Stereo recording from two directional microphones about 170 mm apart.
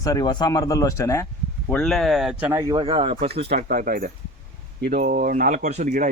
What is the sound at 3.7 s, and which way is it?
Speech, 55° right (ahead or behind).